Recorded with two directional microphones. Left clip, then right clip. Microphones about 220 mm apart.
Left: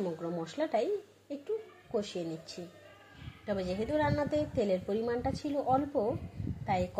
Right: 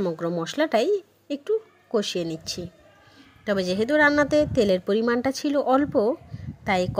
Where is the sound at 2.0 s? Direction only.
35° right (ahead or behind).